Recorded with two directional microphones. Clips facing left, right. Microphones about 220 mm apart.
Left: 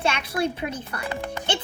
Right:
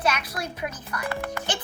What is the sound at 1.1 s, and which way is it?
Speech, 15° left (ahead or behind).